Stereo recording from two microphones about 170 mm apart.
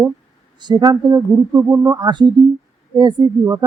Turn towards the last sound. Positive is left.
turn(degrees=-25)  # may be behind; listen again after turning